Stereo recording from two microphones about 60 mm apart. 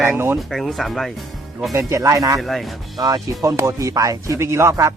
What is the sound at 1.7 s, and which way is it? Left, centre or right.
Speech, right.